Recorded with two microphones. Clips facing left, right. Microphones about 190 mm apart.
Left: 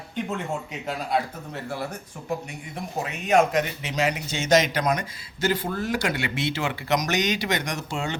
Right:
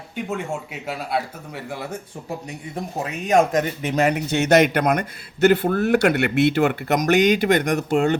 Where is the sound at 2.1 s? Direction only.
35° right (ahead or behind).